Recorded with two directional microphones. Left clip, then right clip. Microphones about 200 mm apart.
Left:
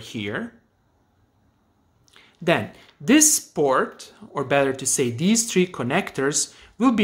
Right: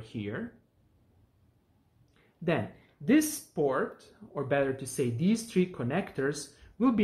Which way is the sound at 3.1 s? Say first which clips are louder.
Left 9 dB; 50° left (ahead or behind).